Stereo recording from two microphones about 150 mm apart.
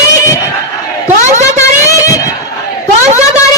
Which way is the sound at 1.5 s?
20° left (ahead or behind).